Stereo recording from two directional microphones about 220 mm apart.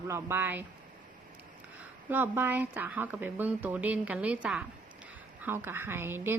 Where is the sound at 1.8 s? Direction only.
10° right (ahead or behind).